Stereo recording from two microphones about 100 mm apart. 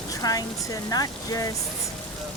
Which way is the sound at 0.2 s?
35° left (ahead or behind).